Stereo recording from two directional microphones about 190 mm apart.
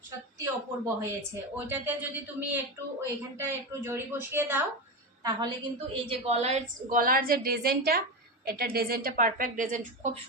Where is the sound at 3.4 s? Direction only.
15° right (ahead or behind).